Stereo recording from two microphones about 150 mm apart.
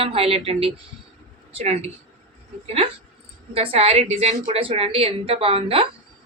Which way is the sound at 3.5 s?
40° right (ahead or behind).